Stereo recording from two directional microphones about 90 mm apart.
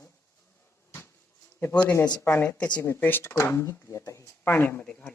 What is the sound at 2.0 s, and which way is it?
Speech, 15° left (ahead or behind).